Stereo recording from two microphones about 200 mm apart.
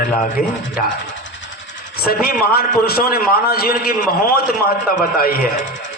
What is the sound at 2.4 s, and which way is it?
A man's voice, 50° left (ahead or behind).